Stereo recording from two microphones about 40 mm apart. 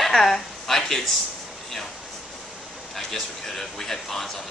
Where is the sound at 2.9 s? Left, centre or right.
Centre.